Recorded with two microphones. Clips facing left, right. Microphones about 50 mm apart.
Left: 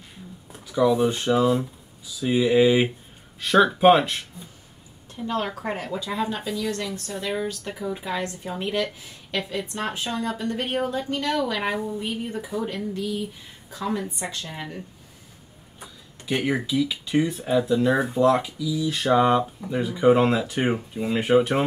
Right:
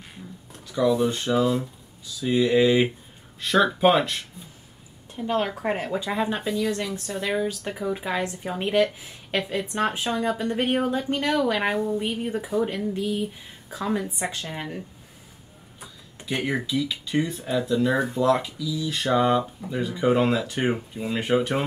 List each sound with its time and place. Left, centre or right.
0.5 s speech: centre
5.1 s speech: right
7.2 s speech: right
12.5 s speech: right
13.7 s speech: centre
16.3 s speech: centre